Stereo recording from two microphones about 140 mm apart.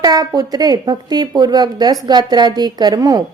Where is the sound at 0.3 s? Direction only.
30° right (ahead or behind).